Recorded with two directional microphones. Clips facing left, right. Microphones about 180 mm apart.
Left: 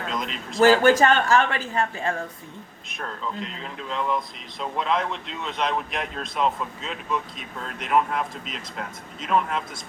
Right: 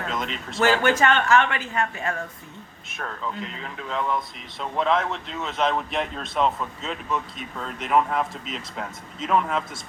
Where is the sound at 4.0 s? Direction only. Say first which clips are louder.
Even; centre (ahead or behind).